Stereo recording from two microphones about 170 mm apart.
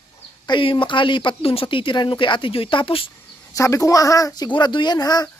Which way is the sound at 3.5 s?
20° left (ahead or behind).